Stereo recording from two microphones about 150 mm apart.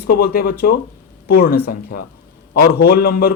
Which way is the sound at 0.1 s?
90° left.